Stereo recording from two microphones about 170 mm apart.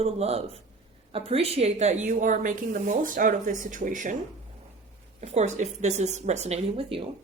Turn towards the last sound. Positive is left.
turn(degrees=-35)  # may be behind; listen again after turning